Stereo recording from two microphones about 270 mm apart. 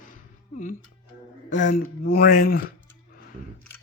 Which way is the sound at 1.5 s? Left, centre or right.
Left.